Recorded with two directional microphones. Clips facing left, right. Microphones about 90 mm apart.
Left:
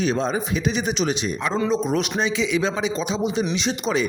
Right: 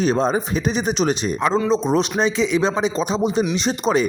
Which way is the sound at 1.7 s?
30° right (ahead or behind).